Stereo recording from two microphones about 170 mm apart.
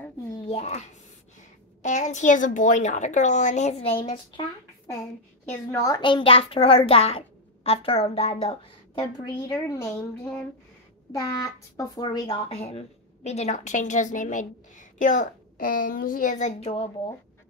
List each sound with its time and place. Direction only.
0.5 s a woman's voice: 40° left (ahead or behind)
5.5 s a woman's voice: 15° left (ahead or behind); by 8.5 s 35° left (ahead or behind)
8.9 s speech: 25° left (ahead or behind)
11.1 s speech: 20° left (ahead or behind)